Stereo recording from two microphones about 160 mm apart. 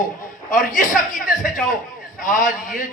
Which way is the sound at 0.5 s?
55° left (ahead or behind).